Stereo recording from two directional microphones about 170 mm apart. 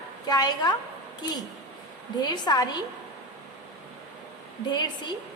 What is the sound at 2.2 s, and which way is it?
Speech, 25° left (ahead or behind).